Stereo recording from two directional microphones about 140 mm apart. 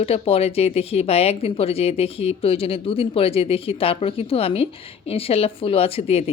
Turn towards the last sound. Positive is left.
turn(degrees=45)  # may be behind; listen again after turning